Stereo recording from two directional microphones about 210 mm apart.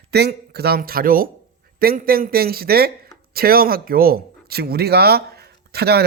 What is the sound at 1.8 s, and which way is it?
Speech, 45° right (ahead or behind).